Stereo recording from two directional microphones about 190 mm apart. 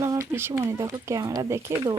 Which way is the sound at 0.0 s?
15° right (ahead or behind).